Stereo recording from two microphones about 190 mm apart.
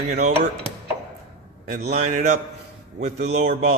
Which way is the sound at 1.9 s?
35° right (ahead or behind).